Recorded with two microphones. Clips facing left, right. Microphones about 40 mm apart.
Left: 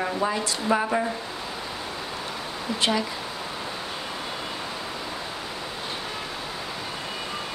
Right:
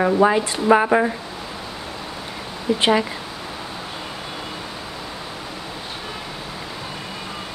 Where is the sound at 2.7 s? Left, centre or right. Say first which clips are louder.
Right 6 dB; right.